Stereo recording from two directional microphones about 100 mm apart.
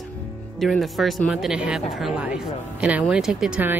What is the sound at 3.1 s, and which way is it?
Speech, 5° right (ahead or behind).